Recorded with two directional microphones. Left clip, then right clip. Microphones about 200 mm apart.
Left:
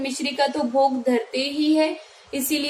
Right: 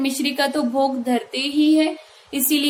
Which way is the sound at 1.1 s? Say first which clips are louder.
Left 1 dB; 35° right (ahead or behind).